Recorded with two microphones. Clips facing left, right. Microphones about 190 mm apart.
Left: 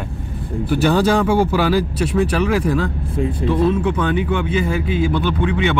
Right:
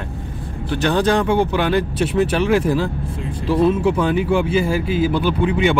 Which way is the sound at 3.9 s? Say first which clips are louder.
Right 2 dB; 5° right (ahead or behind).